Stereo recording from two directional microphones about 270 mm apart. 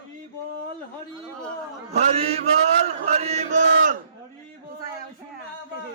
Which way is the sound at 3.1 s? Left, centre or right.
Right.